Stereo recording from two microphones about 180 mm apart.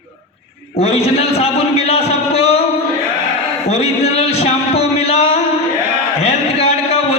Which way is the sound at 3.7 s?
35° left (ahead or behind).